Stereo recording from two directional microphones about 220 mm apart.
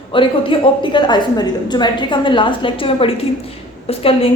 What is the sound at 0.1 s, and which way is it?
A woman's voice, 25° left (ahead or behind).